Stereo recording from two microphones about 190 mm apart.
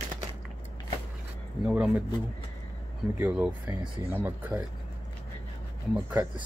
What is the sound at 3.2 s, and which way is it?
Speech, 5° right (ahead or behind).